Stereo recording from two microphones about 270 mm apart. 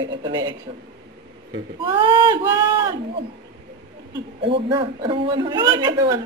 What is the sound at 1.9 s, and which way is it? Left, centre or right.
Speech, centre.